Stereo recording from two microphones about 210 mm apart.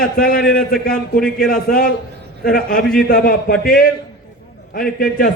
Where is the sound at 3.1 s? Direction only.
45° left (ahead or behind).